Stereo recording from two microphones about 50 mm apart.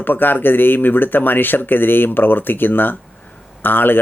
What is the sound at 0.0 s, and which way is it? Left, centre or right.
Speech, left.